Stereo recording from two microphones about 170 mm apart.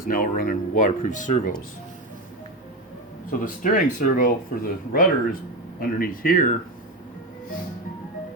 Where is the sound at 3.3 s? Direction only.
55° left (ahead or behind).